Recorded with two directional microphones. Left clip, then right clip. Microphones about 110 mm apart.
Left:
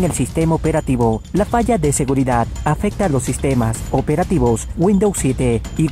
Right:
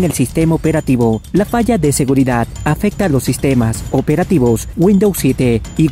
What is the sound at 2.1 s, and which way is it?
Speech, 30° right (ahead or behind).